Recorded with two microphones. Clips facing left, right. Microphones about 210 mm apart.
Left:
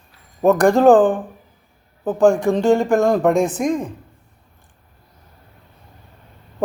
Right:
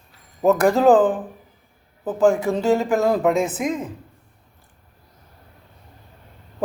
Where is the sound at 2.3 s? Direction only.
5° right (ahead or behind).